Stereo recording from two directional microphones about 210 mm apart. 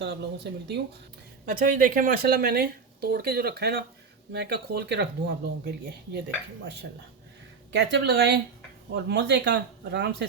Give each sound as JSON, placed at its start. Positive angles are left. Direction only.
{"t": 0.0, "sound": "speech", "side_deg": -55}
{"t": 1.5, "sound": "speech", "side_deg": -40}
{"t": 7.7, "sound": "speech", "side_deg": -55}